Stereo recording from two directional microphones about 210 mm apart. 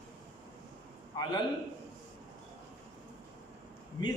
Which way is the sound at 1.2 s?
20° left (ahead or behind).